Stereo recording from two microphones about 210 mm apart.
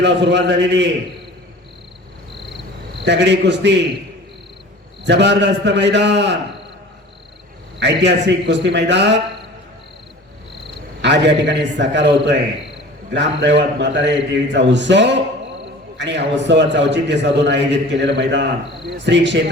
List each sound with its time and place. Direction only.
0.0 s a man's voice: 55° right (ahead or behind)
3.0 s a man's voice: 55° right (ahead or behind)
5.0 s a man's voice: 55° right (ahead or behind)
7.8 s a man's voice: 55° right (ahead or behind)
11.0 s a man's voice: 55° right (ahead or behind)